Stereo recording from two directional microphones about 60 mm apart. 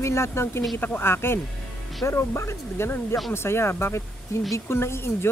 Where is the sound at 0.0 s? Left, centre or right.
Left.